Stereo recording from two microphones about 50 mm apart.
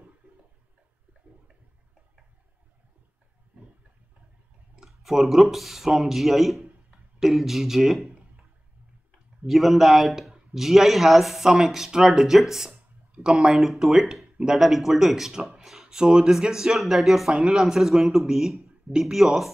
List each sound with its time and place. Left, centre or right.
0.2 s toilet flush: right
4.7 s a man's voice: centre
9.5 s speech: centre
13.6 s speech: centre
17.3 s speech: centre